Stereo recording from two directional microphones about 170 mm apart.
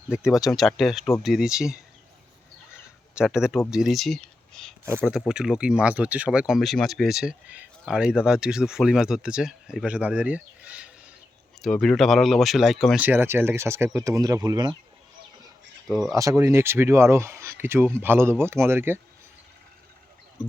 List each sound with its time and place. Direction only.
0.3 s speech: centre (ahead or behind)
2.8 s a sound: 5° right (ahead or behind)
3.7 s speech: centre (ahead or behind)
13.1 s speech: 15° right (ahead or behind)
16.1 s speech: 20° right (ahead or behind)
20.4 s speech: 5° right (ahead or behind)